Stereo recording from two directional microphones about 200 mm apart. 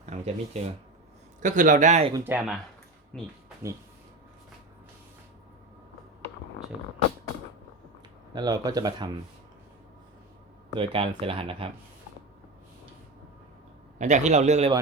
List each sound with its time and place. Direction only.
0.0 s a sound: 35° right (ahead or behind)
1.4 s speech: 40° right (ahead or behind)
2.1 s speech: 10° right (ahead or behind)
3.1 s speech: 5° left (ahead or behind)
8.4 s speech: 20° right (ahead or behind)
10.8 s speech: 25° right (ahead or behind)
14.0 s speech: 35° right (ahead or behind)